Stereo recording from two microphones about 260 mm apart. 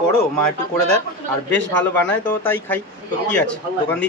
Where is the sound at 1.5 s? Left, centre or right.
Centre.